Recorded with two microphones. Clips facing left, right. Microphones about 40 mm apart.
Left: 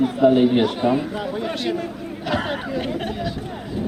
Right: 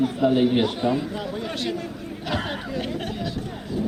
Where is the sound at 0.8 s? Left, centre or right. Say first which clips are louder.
Left 4 dB; left.